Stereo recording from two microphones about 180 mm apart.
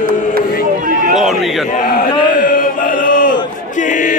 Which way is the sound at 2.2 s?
50° left (ahead or behind).